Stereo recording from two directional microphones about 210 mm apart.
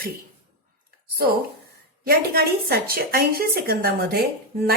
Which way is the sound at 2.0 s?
45° right (ahead or behind).